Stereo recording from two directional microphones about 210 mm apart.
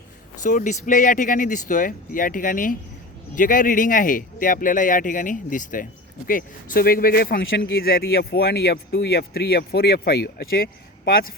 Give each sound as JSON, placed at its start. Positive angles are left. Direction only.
{"t": 0.4, "sound": "speech", "side_deg": 35}